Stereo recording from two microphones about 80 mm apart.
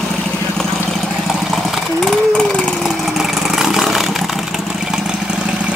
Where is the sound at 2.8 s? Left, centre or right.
Centre.